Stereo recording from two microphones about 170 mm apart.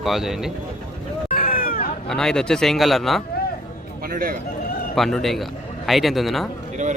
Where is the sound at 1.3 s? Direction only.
55° left (ahead or behind).